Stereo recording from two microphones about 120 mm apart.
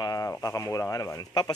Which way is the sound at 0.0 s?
30° left (ahead or behind).